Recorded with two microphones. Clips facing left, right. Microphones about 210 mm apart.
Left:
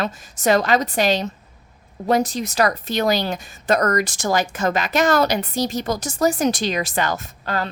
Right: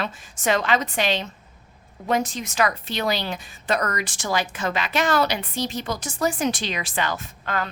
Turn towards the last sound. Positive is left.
turn(degrees=40)  # may be behind; listen again after turning